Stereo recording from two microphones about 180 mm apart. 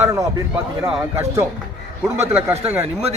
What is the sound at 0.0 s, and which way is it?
Speech, 15° right (ahead or behind).